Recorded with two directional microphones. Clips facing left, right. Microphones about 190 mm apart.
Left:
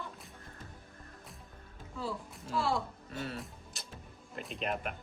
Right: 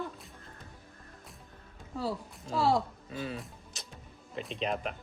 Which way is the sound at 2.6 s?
40° right (ahead or behind).